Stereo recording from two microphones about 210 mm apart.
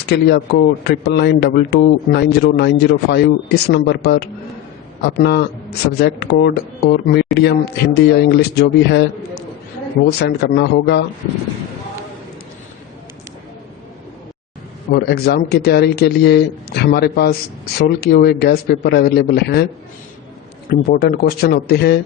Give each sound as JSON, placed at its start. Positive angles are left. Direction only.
{"t": 0.1, "sound": "a man's voice", "side_deg": 50}
{"t": 10.1, "sound": "a man's voice", "side_deg": 50}
{"t": 14.9, "sound": "a man's voice", "side_deg": 45}
{"t": 20.7, "sound": "a man's voice", "side_deg": 45}